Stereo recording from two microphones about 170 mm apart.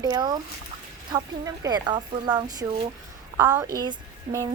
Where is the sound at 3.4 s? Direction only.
15° right (ahead or behind).